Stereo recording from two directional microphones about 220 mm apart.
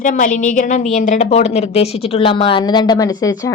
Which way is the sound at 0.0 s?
35° left (ahead or behind).